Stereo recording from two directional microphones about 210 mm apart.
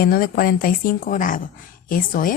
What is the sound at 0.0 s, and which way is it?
A woman's voice, 45° left (ahead or behind).